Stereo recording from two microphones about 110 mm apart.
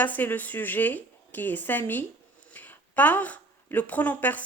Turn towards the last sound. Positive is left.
turn(degrees=15)  # may be behind; listen again after turning